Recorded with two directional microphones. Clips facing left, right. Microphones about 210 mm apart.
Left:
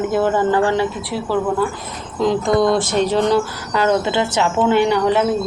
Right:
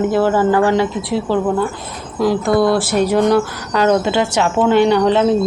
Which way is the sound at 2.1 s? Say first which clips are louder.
Right 1 dB; 5° right (ahead or behind).